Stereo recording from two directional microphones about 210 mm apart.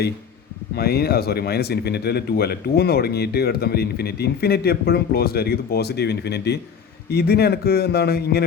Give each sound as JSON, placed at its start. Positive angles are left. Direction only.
{"t": 0.8, "sound": "speech", "side_deg": 50}